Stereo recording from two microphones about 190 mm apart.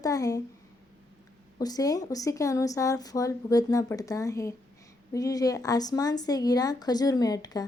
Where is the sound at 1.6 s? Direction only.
20° left (ahead or behind).